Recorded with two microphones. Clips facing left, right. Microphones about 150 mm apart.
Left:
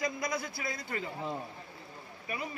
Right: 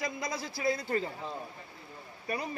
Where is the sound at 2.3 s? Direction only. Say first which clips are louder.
Right 3 dB; 35° right (ahead or behind).